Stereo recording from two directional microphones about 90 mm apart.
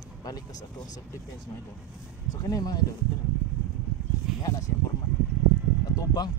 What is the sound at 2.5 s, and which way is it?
Speech, 45° left (ahead or behind).